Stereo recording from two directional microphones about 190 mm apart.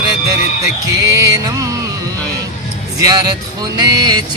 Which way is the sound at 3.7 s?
20° right (ahead or behind).